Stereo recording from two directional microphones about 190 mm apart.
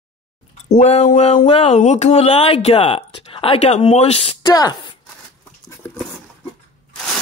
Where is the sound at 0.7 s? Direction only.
35° left (ahead or behind).